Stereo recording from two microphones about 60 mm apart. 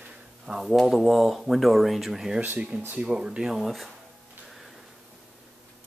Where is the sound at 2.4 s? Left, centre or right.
Right.